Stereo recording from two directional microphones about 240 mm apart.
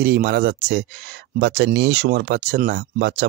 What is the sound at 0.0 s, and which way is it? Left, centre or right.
Speech, right.